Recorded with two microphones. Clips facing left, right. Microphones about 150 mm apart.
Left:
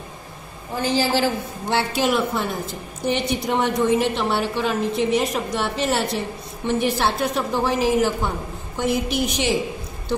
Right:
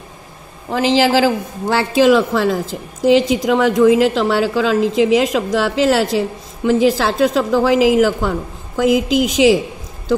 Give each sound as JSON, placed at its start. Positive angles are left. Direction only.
{"t": 0.7, "sound": "a woman's voice", "side_deg": -90}